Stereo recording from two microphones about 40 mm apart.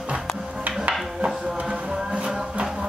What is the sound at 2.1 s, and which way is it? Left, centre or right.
Music, right.